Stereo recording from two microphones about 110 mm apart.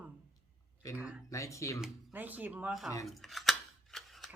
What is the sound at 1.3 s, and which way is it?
Speech, 30° left (ahead or behind).